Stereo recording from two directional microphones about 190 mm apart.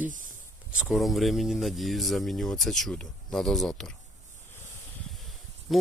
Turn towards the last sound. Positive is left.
turn(degrees=0)  # may be behind; listen again after turning